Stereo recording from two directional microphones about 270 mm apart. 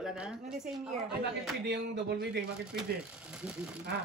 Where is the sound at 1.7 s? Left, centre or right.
Right.